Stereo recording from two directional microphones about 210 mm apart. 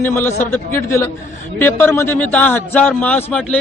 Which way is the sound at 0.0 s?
10° left (ahead or behind).